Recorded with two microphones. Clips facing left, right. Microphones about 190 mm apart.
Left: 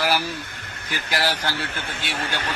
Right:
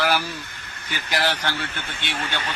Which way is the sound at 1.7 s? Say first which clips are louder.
Left 1 dB; 50° left (ahead or behind).